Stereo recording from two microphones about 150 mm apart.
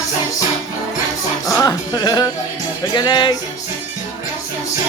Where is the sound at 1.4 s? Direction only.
20° left (ahead or behind).